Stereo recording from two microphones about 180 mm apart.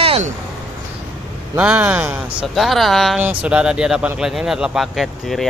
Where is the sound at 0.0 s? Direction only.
35° right (ahead or behind).